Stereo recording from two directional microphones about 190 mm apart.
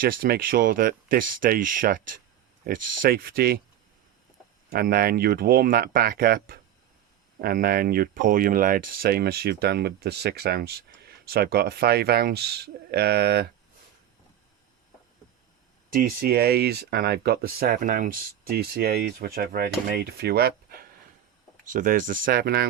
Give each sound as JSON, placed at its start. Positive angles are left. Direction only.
{"t": 0.0, "sound": "speech", "side_deg": -50}
{"t": 4.7, "sound": "speech", "side_deg": -55}
{"t": 15.9, "sound": "speech", "side_deg": -50}
{"t": 21.6, "sound": "speech", "side_deg": -45}